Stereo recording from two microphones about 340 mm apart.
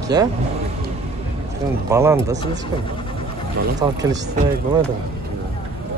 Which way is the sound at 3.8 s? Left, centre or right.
Centre.